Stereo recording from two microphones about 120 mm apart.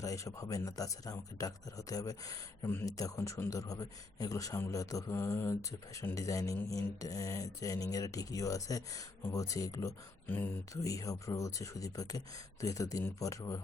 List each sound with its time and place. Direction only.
0.0 s speech: 25° left (ahead or behind)
10.2 s speech: 15° left (ahead or behind)
10.8 s speech: 30° left (ahead or behind)